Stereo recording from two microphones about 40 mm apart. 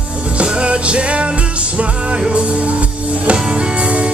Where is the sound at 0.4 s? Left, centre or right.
Right.